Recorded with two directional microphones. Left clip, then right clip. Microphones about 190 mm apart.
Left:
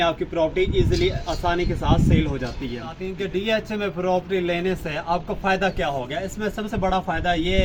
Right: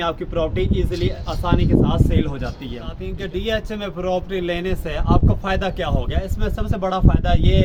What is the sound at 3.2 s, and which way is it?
A man's voice, 25° right (ahead or behind).